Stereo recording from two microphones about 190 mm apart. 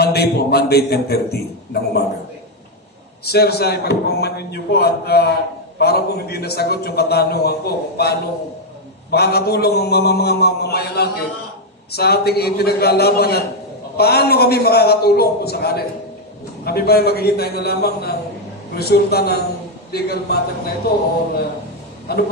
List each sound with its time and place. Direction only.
0.0 s a man's voice: 60° left (ahead or behind)
3.3 s a man's voice: 55° left (ahead or behind)